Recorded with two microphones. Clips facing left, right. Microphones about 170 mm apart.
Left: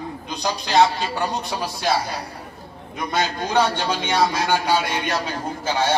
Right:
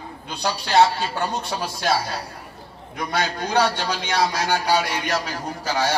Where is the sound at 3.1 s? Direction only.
25° left (ahead or behind).